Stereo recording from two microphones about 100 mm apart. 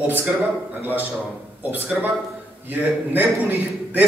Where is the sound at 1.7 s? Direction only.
15° right (ahead or behind).